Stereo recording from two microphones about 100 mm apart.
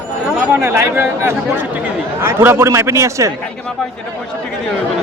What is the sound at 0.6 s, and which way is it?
Speech, 25° right (ahead or behind).